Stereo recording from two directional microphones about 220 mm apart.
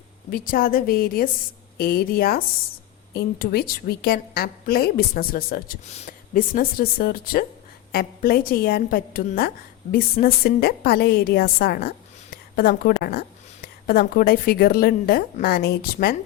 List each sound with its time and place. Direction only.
0.3 s a woman's voice: 40° left (ahead or behind)